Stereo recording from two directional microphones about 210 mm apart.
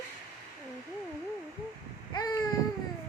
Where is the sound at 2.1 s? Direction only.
15° left (ahead or behind).